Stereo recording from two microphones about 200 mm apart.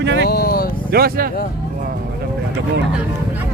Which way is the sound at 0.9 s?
50° right (ahead or behind).